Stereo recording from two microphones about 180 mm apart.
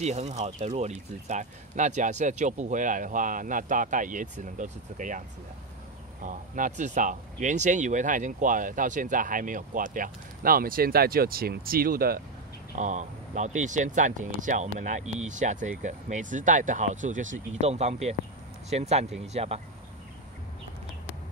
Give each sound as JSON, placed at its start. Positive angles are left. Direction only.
{"t": 0.0, "sound": "speech", "side_deg": -40}
{"t": 6.2, "sound": "speech", "side_deg": -45}
{"t": 12.7, "sound": "speech", "side_deg": -40}